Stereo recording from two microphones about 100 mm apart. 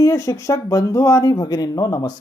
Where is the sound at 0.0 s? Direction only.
35° left (ahead or behind).